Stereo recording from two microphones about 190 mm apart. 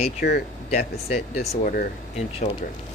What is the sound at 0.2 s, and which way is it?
Speech, 50° left (ahead or behind).